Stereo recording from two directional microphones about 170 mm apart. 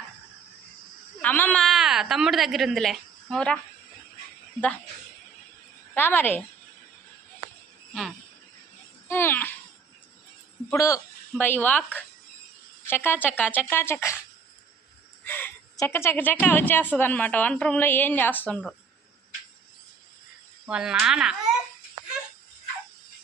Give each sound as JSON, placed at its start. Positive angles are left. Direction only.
{"t": 1.2, "sound": "a woman's voice", "side_deg": 10}
{"t": 5.9, "sound": "a woman's voice", "side_deg": 10}
{"t": 9.0, "sound": "speech", "side_deg": 15}
{"t": 10.7, "sound": "a woman's voice", "side_deg": 20}
{"t": 15.2, "sound": "a woman's voice", "side_deg": 10}
{"t": 20.7, "sound": "a child's voice", "side_deg": -5}